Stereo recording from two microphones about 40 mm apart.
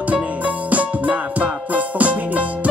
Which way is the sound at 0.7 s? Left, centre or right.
Right.